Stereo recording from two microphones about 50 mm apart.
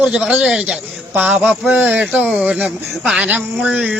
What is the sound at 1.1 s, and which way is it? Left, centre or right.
A man's voice, right.